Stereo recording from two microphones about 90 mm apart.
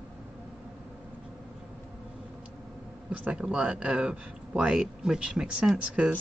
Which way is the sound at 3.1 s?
10° right (ahead or behind).